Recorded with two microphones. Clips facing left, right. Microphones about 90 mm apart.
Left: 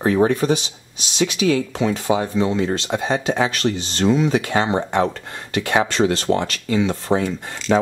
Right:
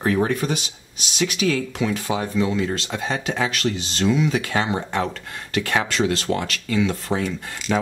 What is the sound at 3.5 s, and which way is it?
Speech, 35° left (ahead or behind).